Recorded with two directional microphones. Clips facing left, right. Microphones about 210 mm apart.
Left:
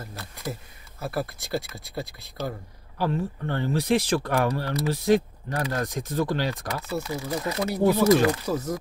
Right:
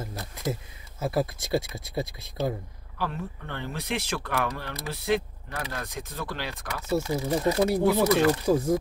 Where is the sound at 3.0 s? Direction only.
35° left (ahead or behind).